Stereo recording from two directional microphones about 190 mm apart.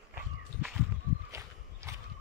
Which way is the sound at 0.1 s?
10° right (ahead or behind).